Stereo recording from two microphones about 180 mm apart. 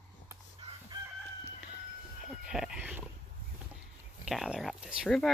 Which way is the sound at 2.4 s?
5° right (ahead or behind).